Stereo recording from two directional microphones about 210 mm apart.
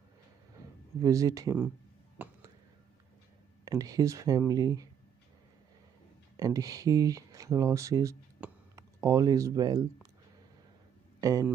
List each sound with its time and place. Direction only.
1.0 s speech: 15° right (ahead or behind)
2.2 s a sound: 10° right (ahead or behind)
3.6 s speech: 15° right (ahead or behind)
6.3 s speech: 15° right (ahead or behind)
11.1 s speech: 15° right (ahead or behind)